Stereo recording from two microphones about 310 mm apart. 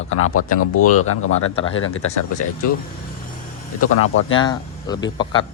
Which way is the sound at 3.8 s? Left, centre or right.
Left.